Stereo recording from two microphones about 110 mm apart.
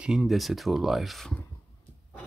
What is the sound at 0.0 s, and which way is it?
Speech, 5° right (ahead or behind).